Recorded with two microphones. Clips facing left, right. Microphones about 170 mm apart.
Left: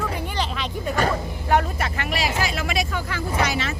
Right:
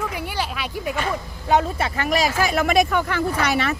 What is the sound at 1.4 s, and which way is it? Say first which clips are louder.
Speech: right 2 dB; 20° right (ahead or behind).